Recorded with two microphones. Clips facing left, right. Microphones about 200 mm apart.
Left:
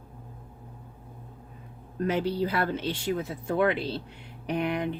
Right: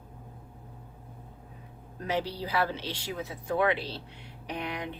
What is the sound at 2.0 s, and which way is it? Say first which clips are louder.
Speech: left 5 dB; 55° left (ahead or behind).